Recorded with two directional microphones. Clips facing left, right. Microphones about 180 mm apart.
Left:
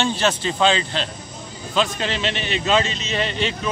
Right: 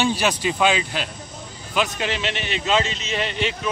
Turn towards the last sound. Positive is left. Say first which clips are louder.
# left 1 dB
turn(degrees=-15)  # may be behind; listen again after turning